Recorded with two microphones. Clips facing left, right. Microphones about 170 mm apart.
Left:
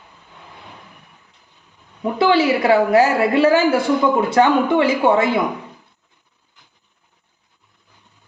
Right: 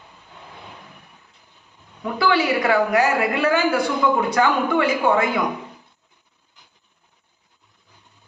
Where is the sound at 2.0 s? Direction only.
25° left (ahead or behind).